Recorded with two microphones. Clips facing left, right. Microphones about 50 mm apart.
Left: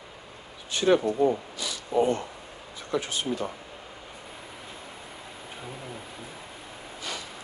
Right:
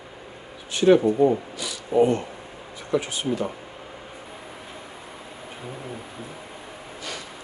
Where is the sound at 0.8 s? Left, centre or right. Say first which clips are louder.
Right 5 dB; right.